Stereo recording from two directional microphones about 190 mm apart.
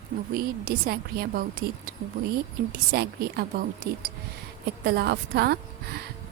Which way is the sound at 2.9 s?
55° right (ahead or behind).